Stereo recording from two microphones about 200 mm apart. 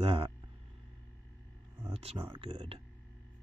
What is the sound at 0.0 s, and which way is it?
Speech, 25° right (ahead or behind).